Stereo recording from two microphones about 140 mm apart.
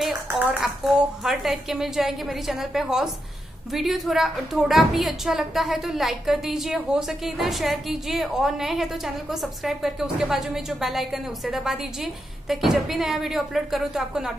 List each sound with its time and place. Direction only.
0.3 s a woman's voice: 5° right (ahead or behind)